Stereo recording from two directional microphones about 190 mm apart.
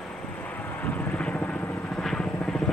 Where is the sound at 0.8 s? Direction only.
10° left (ahead or behind).